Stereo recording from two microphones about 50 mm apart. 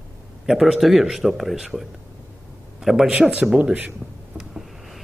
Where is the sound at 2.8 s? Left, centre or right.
Centre.